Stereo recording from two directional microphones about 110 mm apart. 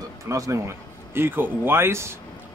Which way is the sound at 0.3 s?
30° right (ahead or behind).